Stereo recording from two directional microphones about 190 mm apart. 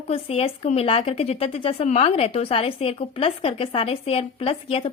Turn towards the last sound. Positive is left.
turn(degrees=30)  # may be behind; listen again after turning